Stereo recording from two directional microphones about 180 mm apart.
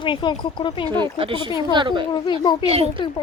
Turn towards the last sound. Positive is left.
turn(degrees=-35)  # may be behind; listen again after turning